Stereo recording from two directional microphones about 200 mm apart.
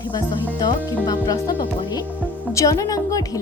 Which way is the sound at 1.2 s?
20° left (ahead or behind).